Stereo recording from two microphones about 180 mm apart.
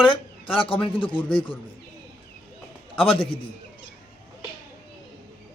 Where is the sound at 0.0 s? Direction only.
25° left (ahead or behind).